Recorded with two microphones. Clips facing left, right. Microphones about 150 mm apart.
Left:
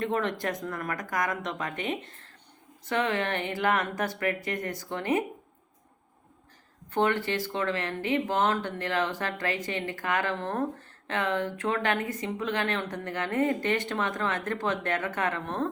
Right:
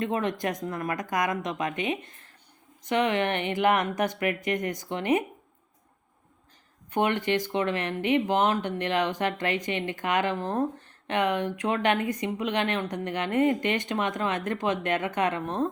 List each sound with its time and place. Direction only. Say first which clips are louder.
0.0 s speech: right 1 dB; 15° right (ahead or behind)
6.9 s speech: right 1 dB; 15° right (ahead or behind)